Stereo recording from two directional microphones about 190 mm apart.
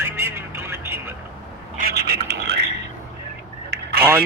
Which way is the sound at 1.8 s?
55° right (ahead or behind).